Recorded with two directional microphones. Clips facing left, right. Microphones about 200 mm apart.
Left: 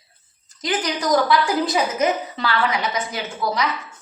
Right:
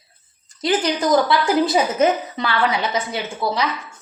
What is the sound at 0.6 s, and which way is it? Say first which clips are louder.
A woman's voice: right 4 dB; 25° right (ahead or behind).